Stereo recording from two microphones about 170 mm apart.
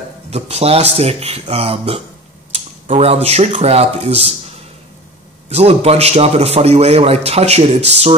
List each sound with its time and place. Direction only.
0.3 s speech: 40° right (ahead or behind)
5.5 s speech: 40° right (ahead or behind)